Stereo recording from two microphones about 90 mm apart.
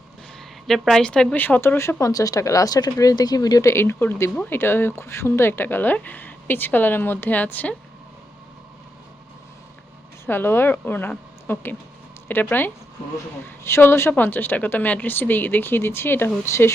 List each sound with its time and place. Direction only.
0.3 s a woman's voice: 5° left (ahead or behind); by 3.7 s 45° left (ahead or behind)
3.7 s speech: 25° left (ahead or behind)
10.2 s a woman's voice: 25° left (ahead or behind)